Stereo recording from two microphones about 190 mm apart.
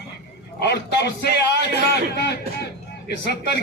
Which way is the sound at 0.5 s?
60° left (ahead or behind).